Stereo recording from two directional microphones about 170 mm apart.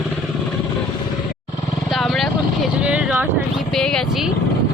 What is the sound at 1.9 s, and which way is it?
Vehicle, centre (ahead or behind).